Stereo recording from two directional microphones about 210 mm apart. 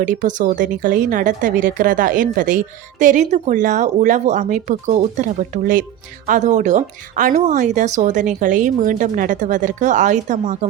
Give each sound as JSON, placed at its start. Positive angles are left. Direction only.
{"t": 0.0, "sound": "a woman's voice", "side_deg": -35}